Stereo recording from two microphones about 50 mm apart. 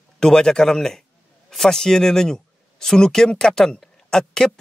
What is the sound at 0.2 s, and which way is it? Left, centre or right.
A man's voice, centre.